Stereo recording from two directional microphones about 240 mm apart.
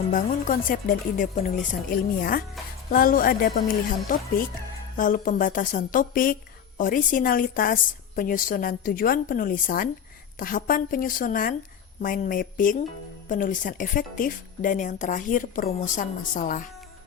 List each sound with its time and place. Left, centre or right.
0.1 s speech: left